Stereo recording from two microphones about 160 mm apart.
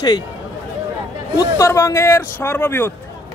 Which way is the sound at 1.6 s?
20° left (ahead or behind).